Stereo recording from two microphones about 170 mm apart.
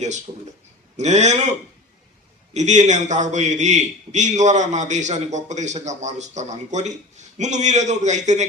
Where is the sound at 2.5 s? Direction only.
45° right (ahead or behind).